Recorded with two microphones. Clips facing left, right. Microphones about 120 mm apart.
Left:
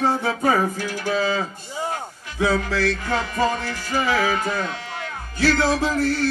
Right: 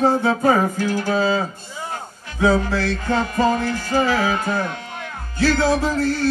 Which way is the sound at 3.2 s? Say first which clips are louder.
Right 6 dB; 45° right (ahead or behind).